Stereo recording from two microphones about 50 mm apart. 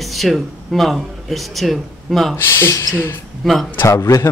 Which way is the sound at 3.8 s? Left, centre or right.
Left.